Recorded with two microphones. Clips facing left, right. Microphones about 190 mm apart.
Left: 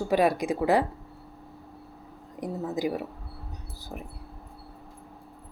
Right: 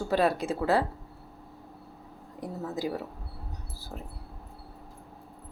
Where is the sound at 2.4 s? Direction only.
15° left (ahead or behind).